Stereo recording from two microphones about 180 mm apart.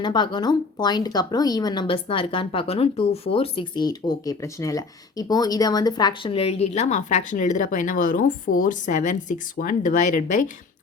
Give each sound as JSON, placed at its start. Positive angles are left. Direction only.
{"t": 0.0, "sound": "speech", "side_deg": 25}